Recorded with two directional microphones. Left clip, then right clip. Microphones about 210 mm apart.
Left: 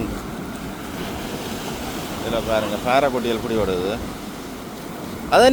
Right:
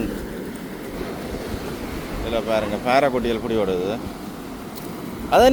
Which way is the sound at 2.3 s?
5° right (ahead or behind).